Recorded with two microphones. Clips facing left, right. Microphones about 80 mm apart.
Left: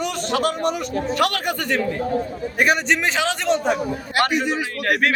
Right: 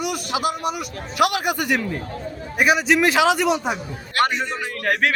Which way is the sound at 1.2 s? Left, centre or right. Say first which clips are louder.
Right 5 dB; centre.